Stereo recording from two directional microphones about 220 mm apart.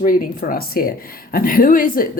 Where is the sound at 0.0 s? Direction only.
40° left (ahead or behind).